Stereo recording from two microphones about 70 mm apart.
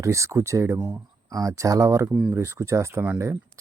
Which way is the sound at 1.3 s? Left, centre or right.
Right.